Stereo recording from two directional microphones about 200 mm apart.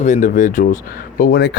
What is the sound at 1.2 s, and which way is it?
Speech, 55° left (ahead or behind).